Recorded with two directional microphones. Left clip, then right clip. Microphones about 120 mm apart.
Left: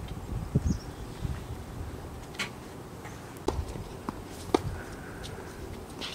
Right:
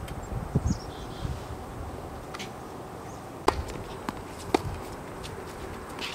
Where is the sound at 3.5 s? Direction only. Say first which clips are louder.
Right 7 dB; 20° right (ahead or behind).